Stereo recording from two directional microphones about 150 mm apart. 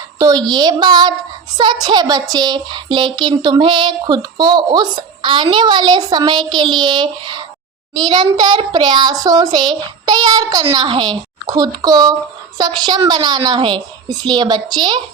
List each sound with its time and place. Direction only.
0.2 s a child's voice: 25° right (ahead or behind)
2.3 s a sound: 30° right (ahead or behind)
8.0 s a child's voice: 30° right (ahead or behind)